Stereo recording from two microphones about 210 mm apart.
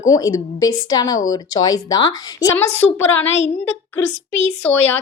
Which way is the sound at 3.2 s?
65° left (ahead or behind).